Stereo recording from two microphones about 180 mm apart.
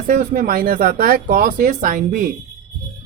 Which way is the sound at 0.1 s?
50° right (ahead or behind).